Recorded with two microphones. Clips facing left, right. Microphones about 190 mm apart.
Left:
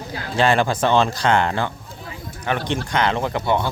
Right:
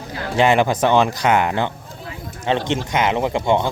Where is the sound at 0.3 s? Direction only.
15° right (ahead or behind).